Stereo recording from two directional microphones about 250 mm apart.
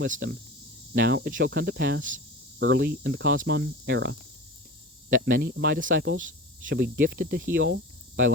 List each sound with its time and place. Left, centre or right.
0.1 s speech: right
2.6 s cricket: right
5.0 s speech: right